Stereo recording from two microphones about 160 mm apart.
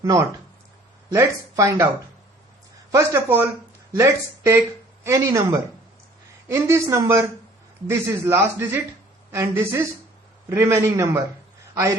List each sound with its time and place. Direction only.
0.0 s speech: 20° right (ahead or behind)
2.9 s speech: 15° right (ahead or behind)